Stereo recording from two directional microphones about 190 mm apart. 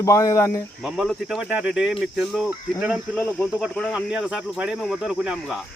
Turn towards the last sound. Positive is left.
turn(degrees=0)  # may be behind; listen again after turning